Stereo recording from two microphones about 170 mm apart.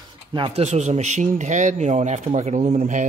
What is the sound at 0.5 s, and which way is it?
Speech, 40° right (ahead or behind).